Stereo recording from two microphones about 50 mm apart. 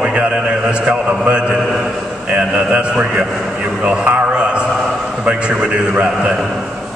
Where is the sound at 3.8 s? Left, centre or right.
Right.